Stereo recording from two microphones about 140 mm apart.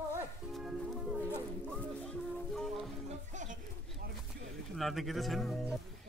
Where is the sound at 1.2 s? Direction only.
10° left (ahead or behind).